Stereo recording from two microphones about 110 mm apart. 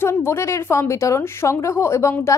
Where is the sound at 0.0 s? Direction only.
20° left (ahead or behind).